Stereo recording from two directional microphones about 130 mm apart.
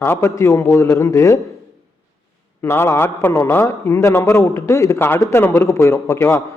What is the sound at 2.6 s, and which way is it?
A man's voice, 20° left (ahead or behind).